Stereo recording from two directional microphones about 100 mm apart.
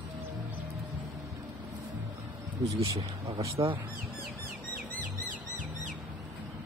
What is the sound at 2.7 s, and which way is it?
Speech, 35° right (ahead or behind).